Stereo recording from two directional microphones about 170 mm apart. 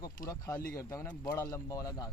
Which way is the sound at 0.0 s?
20° left (ahead or behind).